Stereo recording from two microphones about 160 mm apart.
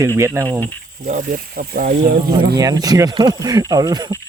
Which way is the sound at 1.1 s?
55° right (ahead or behind).